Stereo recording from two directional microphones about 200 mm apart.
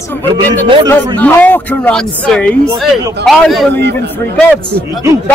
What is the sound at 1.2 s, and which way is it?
A man's voice, 10° left (ahead or behind).